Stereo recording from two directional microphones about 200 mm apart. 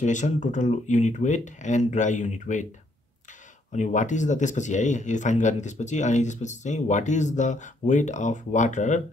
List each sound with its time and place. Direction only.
0.0 s speech: 40° left (ahead or behind)
3.7 s speech: 40° left (ahead or behind)